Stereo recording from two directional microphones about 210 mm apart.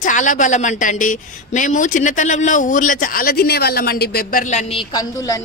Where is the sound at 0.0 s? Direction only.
35° left (ahead or behind); by 5.4 s 15° left (ahead or behind).